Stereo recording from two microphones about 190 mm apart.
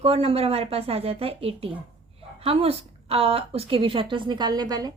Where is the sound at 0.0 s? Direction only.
30° right (ahead or behind).